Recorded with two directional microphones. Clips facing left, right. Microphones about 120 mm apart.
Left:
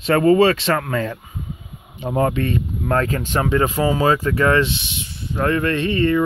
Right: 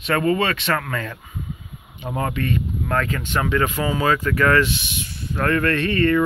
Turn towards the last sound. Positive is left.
turn(degrees=20)  # may be behind; listen again after turning